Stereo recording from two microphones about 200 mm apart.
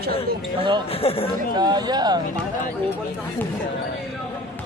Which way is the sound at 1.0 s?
30° left (ahead or behind).